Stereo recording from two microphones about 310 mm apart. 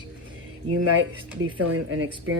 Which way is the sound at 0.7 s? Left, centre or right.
Right.